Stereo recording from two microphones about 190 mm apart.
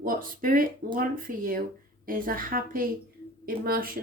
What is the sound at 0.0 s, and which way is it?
Speech, 45° right (ahead or behind).